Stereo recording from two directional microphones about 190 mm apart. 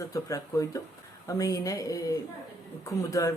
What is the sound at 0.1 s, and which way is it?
Speech, 15° left (ahead or behind).